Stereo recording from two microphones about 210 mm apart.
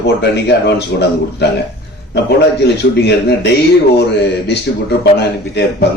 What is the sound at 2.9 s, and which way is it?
A man's voice, 55° left (ahead or behind).